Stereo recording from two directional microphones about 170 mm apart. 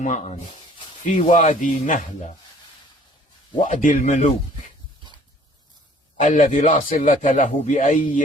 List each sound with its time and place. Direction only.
0.0 s a man's voice: 45° left (ahead or behind)
3.6 s a man's voice: 50° left (ahead or behind)
6.1 s a man's voice: 50° left (ahead or behind)